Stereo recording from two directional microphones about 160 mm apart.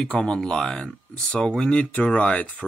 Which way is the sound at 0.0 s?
5° left (ahead or behind).